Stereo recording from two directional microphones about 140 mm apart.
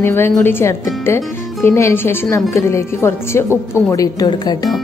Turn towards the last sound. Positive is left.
turn(degrees=30)  # may be behind; listen again after turning